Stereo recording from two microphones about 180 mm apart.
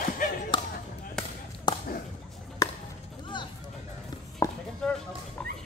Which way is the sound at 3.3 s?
25° left (ahead or behind).